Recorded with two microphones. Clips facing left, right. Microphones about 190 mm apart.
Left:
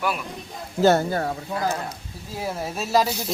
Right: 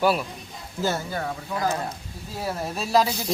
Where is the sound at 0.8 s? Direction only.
70° left (ahead or behind).